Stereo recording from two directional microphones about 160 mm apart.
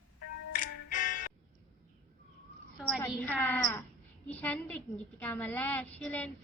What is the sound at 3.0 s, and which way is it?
A woman's voice, 15° left (ahead or behind).